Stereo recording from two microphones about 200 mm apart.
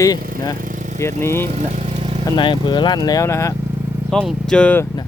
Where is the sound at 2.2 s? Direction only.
25° left (ahead or behind).